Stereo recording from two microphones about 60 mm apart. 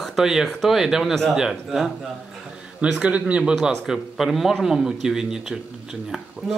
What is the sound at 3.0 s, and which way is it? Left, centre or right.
Speech, centre.